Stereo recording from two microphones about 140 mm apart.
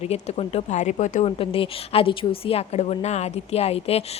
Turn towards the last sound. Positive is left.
turn(degrees=45)  # may be behind; listen again after turning